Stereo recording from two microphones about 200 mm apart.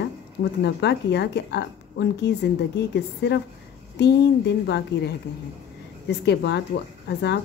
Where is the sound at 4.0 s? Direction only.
60° left (ahead or behind).